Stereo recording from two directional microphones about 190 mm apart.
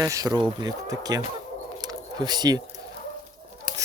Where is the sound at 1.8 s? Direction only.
20° right (ahead or behind).